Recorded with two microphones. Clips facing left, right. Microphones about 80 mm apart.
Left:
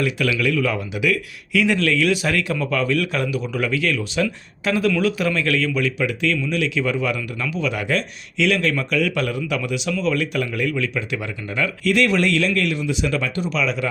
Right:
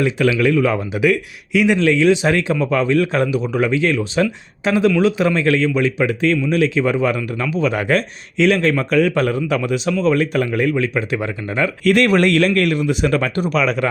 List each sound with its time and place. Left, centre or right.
0.0 s speech: right
1.5 s speech: centre; by 13.8 s right